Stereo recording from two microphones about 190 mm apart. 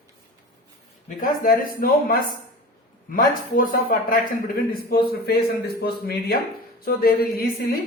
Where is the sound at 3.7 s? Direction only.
45° left (ahead or behind).